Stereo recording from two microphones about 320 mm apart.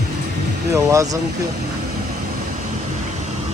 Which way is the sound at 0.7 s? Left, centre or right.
Centre.